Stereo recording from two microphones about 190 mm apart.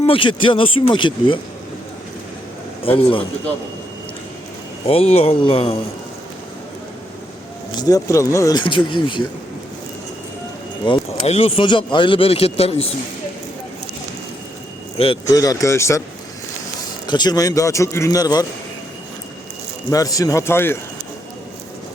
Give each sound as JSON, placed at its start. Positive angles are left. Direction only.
{"t": 0.0, "sound": "speech", "side_deg": 30}
{"t": 2.8, "sound": "speech", "side_deg": 30}
{"t": 4.9, "sound": "speech", "side_deg": 30}
{"t": 7.8, "sound": "speech", "side_deg": 20}
{"t": 10.8, "sound": "speech", "side_deg": 25}
{"t": 14.9, "sound": "speech", "side_deg": 30}
{"t": 15.3, "sound": "a man's voice", "side_deg": 20}
{"t": 17.1, "sound": "speech", "side_deg": 20}
{"t": 19.9, "sound": "a man's voice", "side_deg": 20}